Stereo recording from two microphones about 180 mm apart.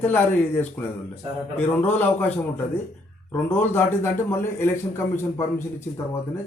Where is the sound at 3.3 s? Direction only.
10° left (ahead or behind).